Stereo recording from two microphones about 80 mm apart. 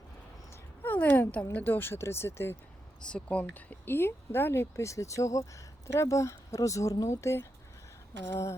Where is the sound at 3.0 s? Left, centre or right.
Centre; by 7.1 s left.